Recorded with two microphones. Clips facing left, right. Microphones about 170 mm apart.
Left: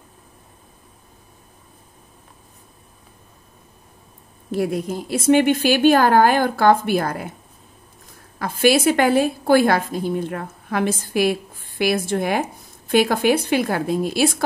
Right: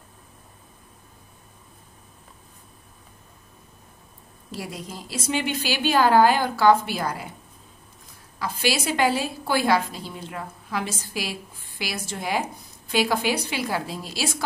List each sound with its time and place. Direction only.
4.5 s a woman's voice: 55° left (ahead or behind)
8.4 s a woman's voice: 50° left (ahead or behind)